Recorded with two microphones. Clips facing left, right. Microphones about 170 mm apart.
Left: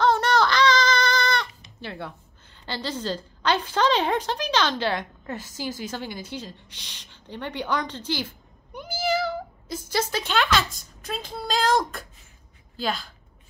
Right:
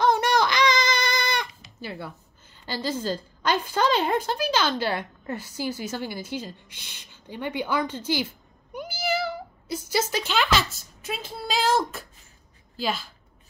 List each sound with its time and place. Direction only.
0.0 s baby cry: 15° right (ahead or behind)
2.6 s a woman's voice: 10° right (ahead or behind)
5.3 s a woman's voice: 45° left (ahead or behind)
5.9 s a woman's voice: 5° right (ahead or behind)
9.0 s cat: 10° right (ahead or behind)
9.8 s a woman's voice: 10° right (ahead or behind)